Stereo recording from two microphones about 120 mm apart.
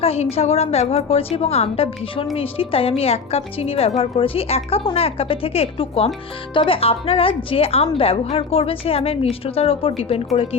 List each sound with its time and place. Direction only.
0.0 s a woman's voice: 55° left (ahead or behind)